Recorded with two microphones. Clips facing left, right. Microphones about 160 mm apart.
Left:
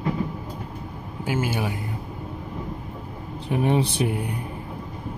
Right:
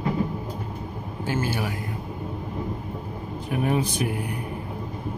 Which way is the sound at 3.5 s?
25° left (ahead or behind).